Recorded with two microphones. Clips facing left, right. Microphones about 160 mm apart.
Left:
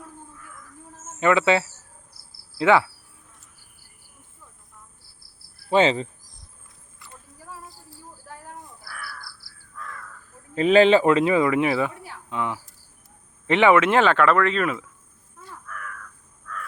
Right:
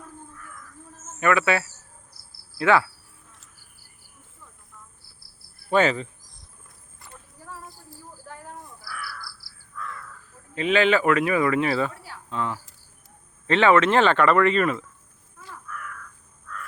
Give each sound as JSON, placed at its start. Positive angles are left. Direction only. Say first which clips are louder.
{"t": 1.2, "sound": "speech", "louder": "left 2 dB", "side_deg": 20}
{"t": 5.7, "sound": "speech", "louder": "left 2 dB", "side_deg": 25}
{"t": 8.8, "sound": "crow", "louder": "right 2 dB", "side_deg": 50}
{"t": 10.5, "sound": "speech", "louder": "left 5 dB", "side_deg": 35}